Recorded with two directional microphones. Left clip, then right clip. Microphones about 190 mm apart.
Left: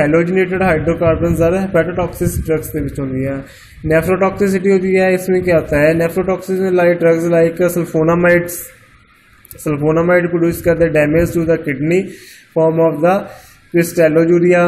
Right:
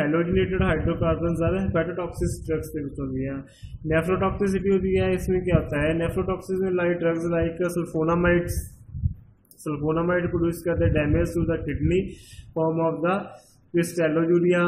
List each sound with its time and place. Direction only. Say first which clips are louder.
0.0 s a man's voice: left 10 dB; 10° left (ahead or behind)
3.9 s a man's voice: left 10 dB; 10° left (ahead or behind)
9.7 s a man's voice: left 12 dB; 10° left (ahead or behind)